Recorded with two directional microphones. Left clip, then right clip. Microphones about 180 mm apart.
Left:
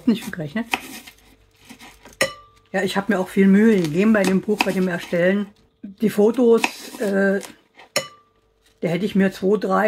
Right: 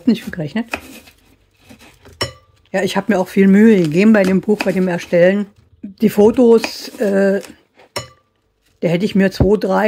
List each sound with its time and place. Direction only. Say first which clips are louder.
0.0 s speech: right 4 dB; 45° right (ahead or behind)
2.7 s speech: right 5 dB; 50° right (ahead or behind)
5.9 s speech: right 6 dB; 55° right (ahead or behind)
8.7 s speech: right 5 dB; 55° right (ahead or behind)